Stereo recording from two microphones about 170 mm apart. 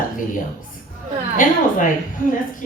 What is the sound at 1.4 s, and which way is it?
Speech, 50° left (ahead or behind).